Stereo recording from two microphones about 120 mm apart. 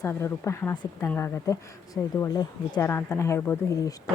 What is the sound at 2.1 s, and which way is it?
Speech, 30° left (ahead or behind).